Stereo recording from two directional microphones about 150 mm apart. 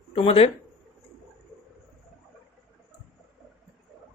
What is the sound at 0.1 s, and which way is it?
Speech, 40° left (ahead or behind).